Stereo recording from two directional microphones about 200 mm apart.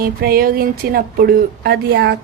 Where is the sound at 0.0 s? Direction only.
50° right (ahead or behind).